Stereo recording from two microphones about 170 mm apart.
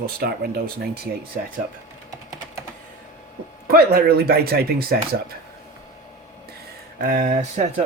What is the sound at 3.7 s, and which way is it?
Speech, 65° right (ahead or behind).